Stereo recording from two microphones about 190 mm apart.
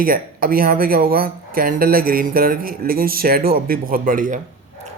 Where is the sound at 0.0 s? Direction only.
50° right (ahead or behind).